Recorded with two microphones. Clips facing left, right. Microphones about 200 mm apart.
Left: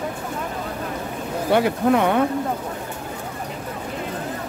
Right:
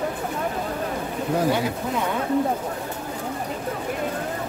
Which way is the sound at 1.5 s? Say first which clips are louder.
Left 6 dB; 65° left (ahead or behind).